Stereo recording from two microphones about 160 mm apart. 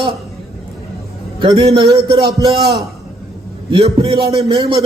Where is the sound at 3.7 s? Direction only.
35° right (ahead or behind).